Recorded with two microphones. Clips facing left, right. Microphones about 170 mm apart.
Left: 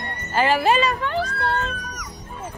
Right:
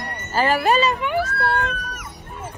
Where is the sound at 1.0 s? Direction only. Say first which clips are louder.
Right 2 dB; 15° right (ahead or behind).